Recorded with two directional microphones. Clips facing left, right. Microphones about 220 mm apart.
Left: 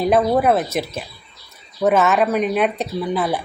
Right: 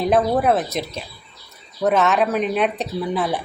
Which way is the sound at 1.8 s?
Centre (ahead or behind).